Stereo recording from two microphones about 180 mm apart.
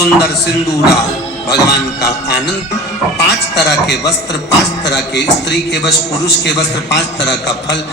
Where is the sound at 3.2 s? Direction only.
70° left (ahead or behind).